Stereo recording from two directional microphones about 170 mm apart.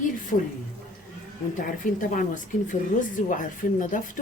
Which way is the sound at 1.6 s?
50° left (ahead or behind).